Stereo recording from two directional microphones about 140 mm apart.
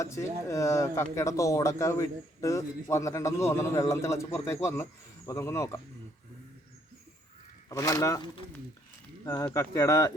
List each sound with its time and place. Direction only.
0.0 s a man's voice: 20° left (ahead or behind)
7.7 s a man's voice: 25° left (ahead or behind)